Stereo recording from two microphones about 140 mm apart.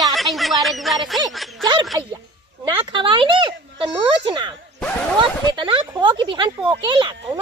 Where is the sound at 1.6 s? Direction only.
35° right (ahead or behind).